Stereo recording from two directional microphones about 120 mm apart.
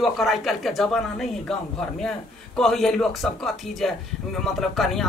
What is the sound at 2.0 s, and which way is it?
A man's voice, 5° left (ahead or behind).